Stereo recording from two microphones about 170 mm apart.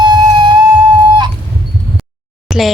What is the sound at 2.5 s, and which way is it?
Speech, 5° right (ahead or behind).